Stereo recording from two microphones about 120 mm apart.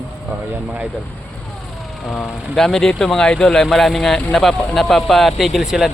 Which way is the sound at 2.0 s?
Centre (ahead or behind).